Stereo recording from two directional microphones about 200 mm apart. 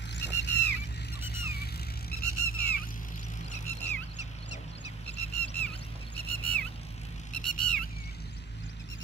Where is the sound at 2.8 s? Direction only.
40° left (ahead or behind).